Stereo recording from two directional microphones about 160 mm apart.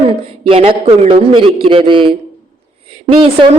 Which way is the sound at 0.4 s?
35° right (ahead or behind).